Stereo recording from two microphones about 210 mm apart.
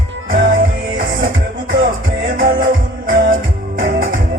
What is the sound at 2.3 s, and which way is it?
Music, 40° right (ahead or behind).